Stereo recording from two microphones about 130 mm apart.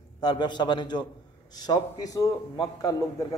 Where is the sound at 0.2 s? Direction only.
35° left (ahead or behind).